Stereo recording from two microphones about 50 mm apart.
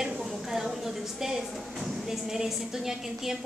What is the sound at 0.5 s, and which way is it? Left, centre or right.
A woman's voice, centre.